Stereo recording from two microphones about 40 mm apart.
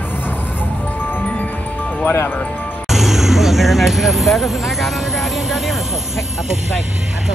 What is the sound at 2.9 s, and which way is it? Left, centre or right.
Speech, centre.